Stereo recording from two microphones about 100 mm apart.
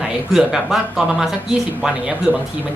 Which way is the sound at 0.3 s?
5° right (ahead or behind).